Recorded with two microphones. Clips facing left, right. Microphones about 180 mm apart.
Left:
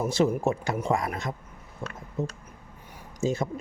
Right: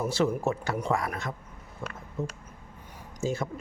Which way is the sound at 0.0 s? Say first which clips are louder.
Left 2 dB; 15° left (ahead or behind).